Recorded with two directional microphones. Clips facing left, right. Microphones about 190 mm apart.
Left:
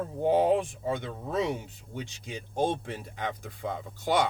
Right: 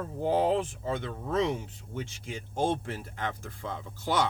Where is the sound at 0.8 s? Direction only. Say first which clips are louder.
Left 1 dB; 15° left (ahead or behind).